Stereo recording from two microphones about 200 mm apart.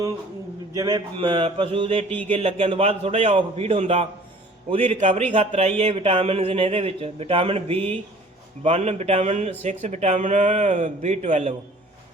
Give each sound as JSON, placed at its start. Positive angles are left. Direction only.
{"t": 0.7, "sound": "a man's voice", "side_deg": -20}